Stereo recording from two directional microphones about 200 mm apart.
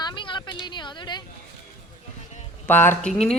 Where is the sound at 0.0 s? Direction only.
25° left (ahead or behind).